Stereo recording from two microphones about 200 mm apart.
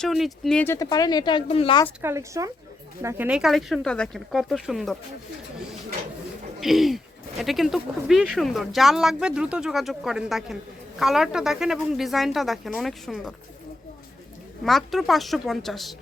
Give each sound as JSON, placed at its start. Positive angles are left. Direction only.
{"t": 0.0, "sound": "speech", "side_deg": 0}
{"t": 2.0, "sound": "speech", "side_deg": -15}
{"t": 6.6, "sound": "speech", "side_deg": 0}
{"t": 14.6, "sound": "speech", "side_deg": 0}